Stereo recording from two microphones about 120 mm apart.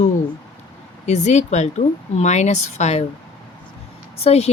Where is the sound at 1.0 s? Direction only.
70° left (ahead or behind).